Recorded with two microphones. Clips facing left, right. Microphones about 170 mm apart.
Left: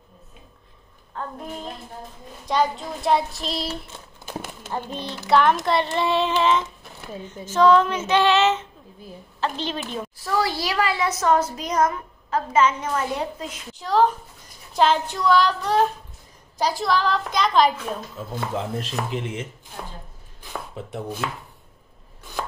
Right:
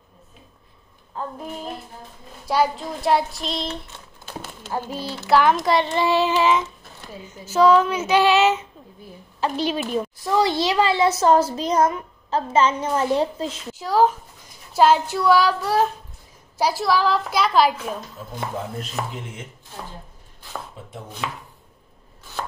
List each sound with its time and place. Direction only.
1.1 s child singing: 5° right (ahead or behind)
4.3 s a sound: 15° left (ahead or behind)
4.7 s child singing: 5° right (ahead or behind)
9.4 s speech: 10° right (ahead or behind)
10.3 s a child's voice: 20° right (ahead or behind)
13.7 s child singing: 5° right (ahead or behind)
18.8 s speech: 90° left
20.8 s chopping: 75° left (ahead or behind)